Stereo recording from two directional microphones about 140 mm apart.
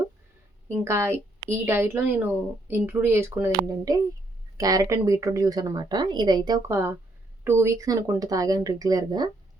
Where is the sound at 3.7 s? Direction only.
25° right (ahead or behind).